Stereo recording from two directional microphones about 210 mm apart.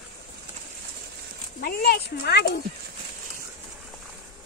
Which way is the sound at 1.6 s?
50° left (ahead or behind).